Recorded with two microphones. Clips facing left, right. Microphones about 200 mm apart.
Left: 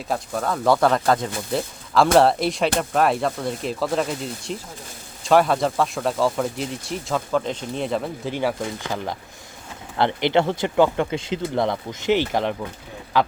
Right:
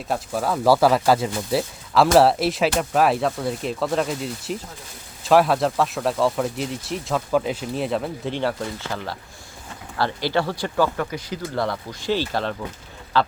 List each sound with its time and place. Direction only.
0.1 s speech: 5° right (ahead or behind); by 13.3 s 15° left (ahead or behind)